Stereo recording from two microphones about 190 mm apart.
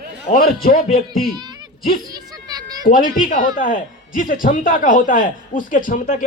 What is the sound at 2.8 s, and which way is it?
A man's voice, 45° left (ahead or behind).